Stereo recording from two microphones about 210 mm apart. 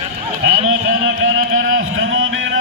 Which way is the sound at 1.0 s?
75° right (ahead or behind).